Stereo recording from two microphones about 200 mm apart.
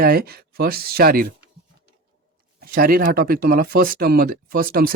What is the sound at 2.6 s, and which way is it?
Speech, 45° right (ahead or behind).